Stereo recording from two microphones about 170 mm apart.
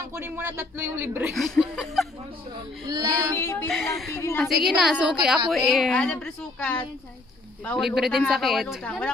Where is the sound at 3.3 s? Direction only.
15° left (ahead or behind).